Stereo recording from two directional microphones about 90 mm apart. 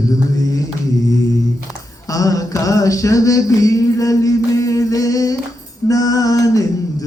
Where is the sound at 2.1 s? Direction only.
40° left (ahead or behind).